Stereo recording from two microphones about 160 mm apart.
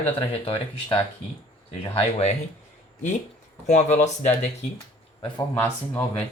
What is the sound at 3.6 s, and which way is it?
Speech, 45° left (ahead or behind).